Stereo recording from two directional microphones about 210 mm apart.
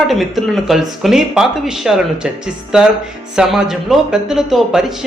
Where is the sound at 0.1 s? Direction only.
Centre (ahead or behind).